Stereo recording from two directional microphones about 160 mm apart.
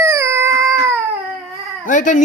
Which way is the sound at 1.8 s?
55° left (ahead or behind).